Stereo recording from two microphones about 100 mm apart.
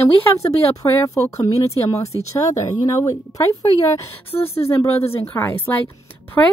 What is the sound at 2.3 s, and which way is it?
Speech, 35° left (ahead or behind).